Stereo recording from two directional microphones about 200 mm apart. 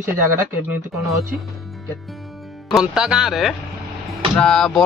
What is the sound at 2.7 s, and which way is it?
Speech, 5° right (ahead or behind).